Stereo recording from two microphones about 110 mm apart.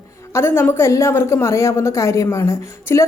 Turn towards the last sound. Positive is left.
turn(degrees=25)  # may be behind; listen again after turning